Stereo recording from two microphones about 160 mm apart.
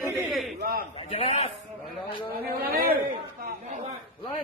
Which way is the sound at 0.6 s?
70° right (ahead or behind).